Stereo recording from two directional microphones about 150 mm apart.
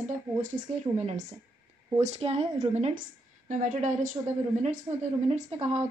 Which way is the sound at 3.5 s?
55° right (ahead or behind).